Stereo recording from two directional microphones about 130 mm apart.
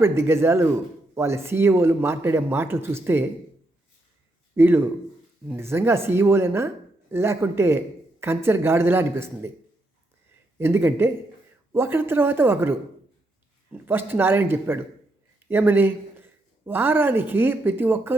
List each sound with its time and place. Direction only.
0.0 s speech: 20° right (ahead or behind)
4.5 s a woman's voice: 15° right (ahead or behind)
10.6 s a woman's voice: 20° right (ahead or behind)
13.8 s a woman's voice: 15° right (ahead or behind)